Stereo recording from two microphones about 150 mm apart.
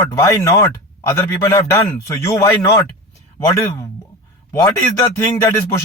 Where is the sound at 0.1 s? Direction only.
20° left (ahead or behind).